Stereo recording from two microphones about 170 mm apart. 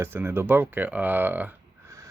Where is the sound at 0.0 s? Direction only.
15° right (ahead or behind).